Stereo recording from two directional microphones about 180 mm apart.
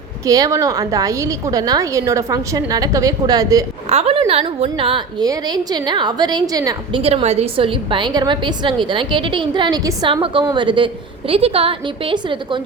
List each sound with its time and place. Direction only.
0.3 s a woman's voice: 20° right (ahead or behind)
3.8 s a woman's voice: 35° right (ahead or behind); by 7.0 s 20° right (ahead or behind)
7.0 s a woman's voice: 35° right (ahead or behind)